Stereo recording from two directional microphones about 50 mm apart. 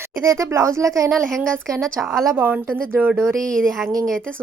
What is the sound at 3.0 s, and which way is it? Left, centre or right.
Speech, right.